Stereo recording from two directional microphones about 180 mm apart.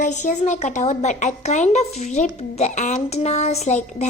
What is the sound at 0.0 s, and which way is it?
A woman's voice, 40° left (ahead or behind).